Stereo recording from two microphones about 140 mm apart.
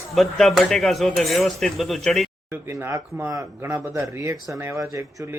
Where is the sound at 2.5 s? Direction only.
15° right (ahead or behind).